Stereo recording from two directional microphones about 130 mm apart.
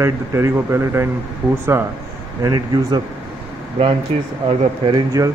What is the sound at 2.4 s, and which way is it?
Speech, 30° right (ahead or behind).